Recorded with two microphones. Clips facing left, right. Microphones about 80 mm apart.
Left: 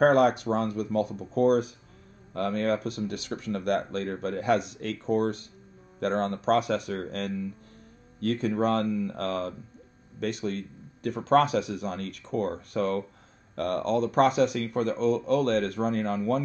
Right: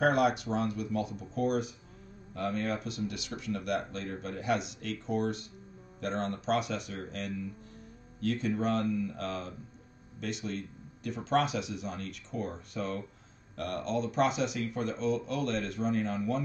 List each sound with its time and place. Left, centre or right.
0.0 s speech: left